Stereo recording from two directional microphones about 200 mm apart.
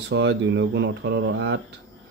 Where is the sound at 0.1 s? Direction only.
60° right (ahead or behind).